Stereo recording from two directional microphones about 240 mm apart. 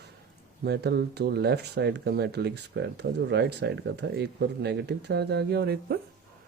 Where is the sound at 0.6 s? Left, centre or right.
Right.